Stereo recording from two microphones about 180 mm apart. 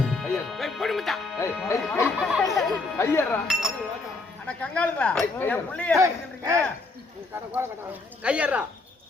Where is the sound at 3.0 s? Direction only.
15° left (ahead or behind).